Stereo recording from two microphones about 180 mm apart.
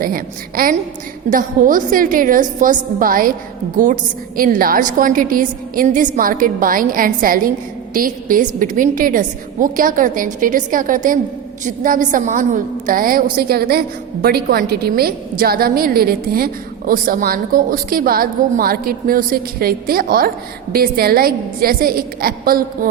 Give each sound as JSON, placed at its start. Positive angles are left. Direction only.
{"t": 0.0, "sound": "a woman's voice", "side_deg": -50}
{"t": 4.4, "sound": "a woman's voice", "side_deg": -50}